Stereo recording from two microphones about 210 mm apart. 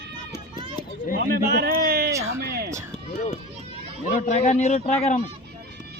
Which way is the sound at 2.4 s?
50° right (ahead or behind).